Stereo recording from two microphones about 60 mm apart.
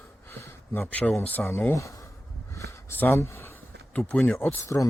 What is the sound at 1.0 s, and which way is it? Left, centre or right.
Speech, left.